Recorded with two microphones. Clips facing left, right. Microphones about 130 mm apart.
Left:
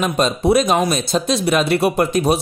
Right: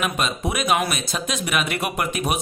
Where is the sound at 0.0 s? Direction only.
35° left (ahead or behind).